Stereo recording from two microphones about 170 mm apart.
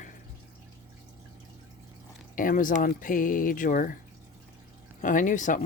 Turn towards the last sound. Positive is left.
turn(degrees=50)  # may be behind; listen again after turning